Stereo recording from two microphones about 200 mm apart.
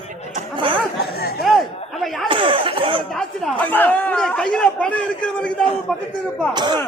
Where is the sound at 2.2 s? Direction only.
25° right (ahead or behind).